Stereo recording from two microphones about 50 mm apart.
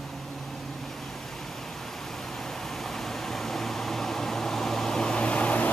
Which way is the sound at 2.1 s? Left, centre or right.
Centre.